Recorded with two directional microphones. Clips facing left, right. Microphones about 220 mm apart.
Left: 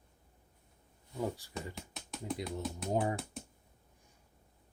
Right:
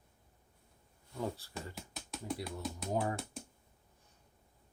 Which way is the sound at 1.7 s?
Centre (ahead or behind).